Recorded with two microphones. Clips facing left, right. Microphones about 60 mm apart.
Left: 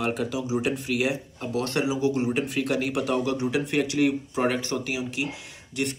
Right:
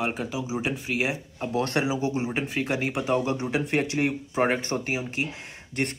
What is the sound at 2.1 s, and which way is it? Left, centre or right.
Speech, right.